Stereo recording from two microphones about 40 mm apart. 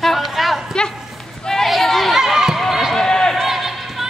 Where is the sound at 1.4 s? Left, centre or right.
Centre.